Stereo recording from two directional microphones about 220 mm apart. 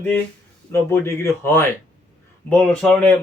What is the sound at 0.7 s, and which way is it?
Speech, 10° left (ahead or behind).